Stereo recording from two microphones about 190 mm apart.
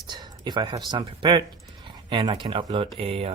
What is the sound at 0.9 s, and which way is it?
Speech, 25° right (ahead or behind).